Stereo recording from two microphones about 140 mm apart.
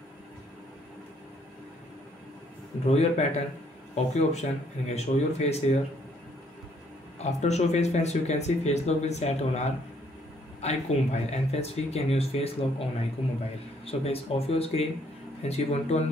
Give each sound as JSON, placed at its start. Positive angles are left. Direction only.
{"t": 2.9, "sound": "speech", "side_deg": 50}
{"t": 7.2, "sound": "speech", "side_deg": 55}
{"t": 13.8, "sound": "speech", "side_deg": 45}